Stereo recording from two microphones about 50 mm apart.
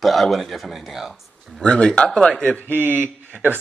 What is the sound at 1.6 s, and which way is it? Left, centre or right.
Speech, centre.